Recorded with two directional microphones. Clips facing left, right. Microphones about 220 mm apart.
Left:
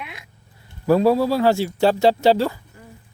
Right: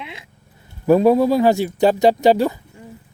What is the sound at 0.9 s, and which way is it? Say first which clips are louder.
Speech: right 3 dB; 20° right (ahead or behind).